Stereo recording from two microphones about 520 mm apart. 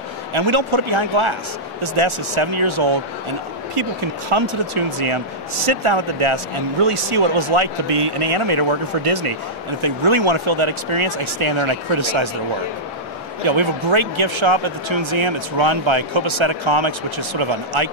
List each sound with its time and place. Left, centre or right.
0.3 s speech: right
4.3 s speech: right
13.5 s speech: right